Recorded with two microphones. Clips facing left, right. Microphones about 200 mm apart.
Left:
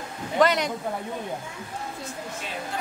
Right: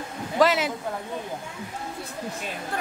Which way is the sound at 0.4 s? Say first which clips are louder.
Even; 5° right (ahead or behind).